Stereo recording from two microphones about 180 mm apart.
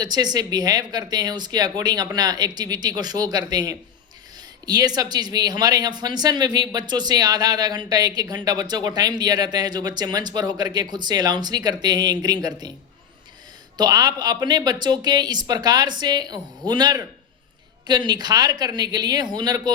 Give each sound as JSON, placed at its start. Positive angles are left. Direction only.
{"t": 0.0, "sound": "speech", "side_deg": -20}
{"t": 13.7, "sound": "speech", "side_deg": -20}